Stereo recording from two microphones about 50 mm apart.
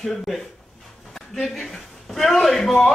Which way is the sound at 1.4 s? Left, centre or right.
Centre.